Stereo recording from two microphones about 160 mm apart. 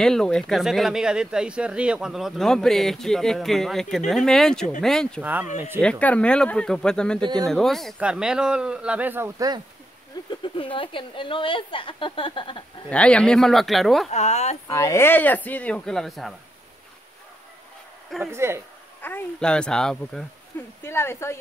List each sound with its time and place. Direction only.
0.0 s speech: 5° left (ahead or behind)
5.2 s a man's voice: 10° right (ahead or behind)
5.8 s a man's voice: 5° left (ahead or behind); by 9.5 s 15° right (ahead or behind)
10.4 s a woman's voice: 30° left (ahead or behind)
12.9 s speech: 5° left (ahead or behind)
14.1 s speech: 45° left (ahead or behind)
14.7 s speech: 15° left (ahead or behind); by 16.3 s centre (ahead or behind)
18.2 s a man's voice: 15° right (ahead or behind)
18.9 s speech: 10° left (ahead or behind)
20.8 s speech: 15° left (ahead or behind)